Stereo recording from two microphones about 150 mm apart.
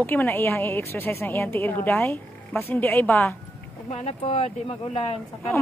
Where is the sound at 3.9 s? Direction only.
45° left (ahead or behind).